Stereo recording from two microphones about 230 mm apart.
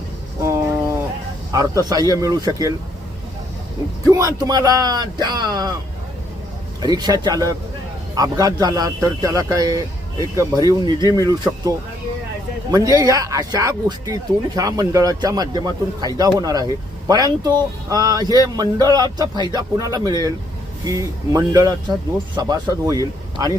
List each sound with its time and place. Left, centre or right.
0.4 s a sound: centre
1.5 s speech: centre
4.0 s speech: centre
6.8 s speech: centre
12.7 s speech: centre